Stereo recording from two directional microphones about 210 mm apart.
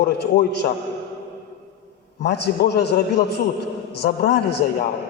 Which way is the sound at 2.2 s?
55° left (ahead or behind).